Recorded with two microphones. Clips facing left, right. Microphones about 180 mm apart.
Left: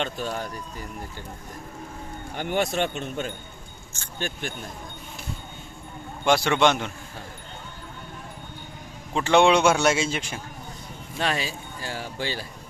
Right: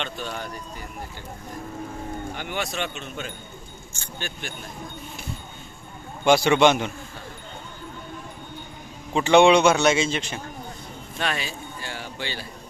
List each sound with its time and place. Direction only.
0.0 s speech: 40° left (ahead or behind)
2.3 s speech: 50° left (ahead or behind)
6.2 s speech: centre (ahead or behind)
9.1 s speech: centre (ahead or behind)
11.2 s speech: 35° left (ahead or behind)